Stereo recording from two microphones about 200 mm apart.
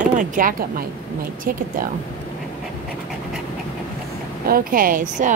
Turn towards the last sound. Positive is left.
turn(degrees=-40)  # may be behind; listen again after turning